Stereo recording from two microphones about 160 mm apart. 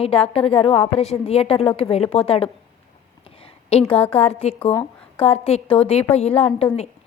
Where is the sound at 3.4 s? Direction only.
40° left (ahead or behind).